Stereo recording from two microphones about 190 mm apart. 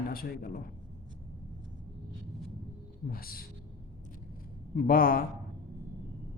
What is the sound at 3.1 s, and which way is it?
Speech, 50° left (ahead or behind).